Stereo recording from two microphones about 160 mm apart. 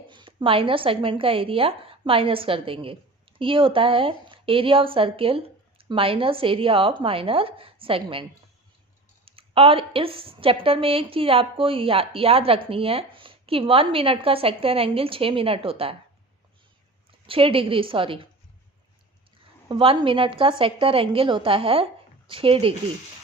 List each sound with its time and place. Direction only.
0.1 s a woman's voice: 30° right (ahead or behind)
17.1 s a woman's voice: 35° right (ahead or behind)
19.6 s a woman's voice: 35° right (ahead or behind)